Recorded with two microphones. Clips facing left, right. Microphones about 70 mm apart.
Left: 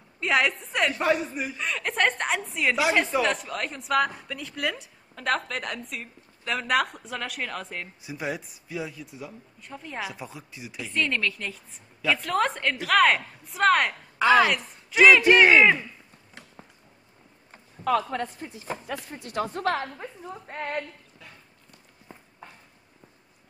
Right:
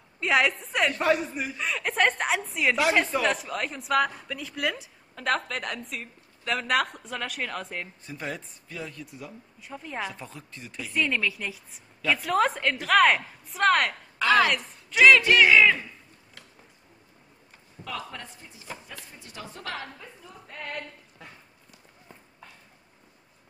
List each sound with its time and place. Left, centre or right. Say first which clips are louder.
0.2 s speech: even; centre
8.0 s speech: left 3 dB; centre
10.9 s speech: even; centre
14.1 s a woman's voice: left 2 dB; centre
15.2 s speech: left 2 dB; left
17.8 s a woman's voice: left 12 dB; left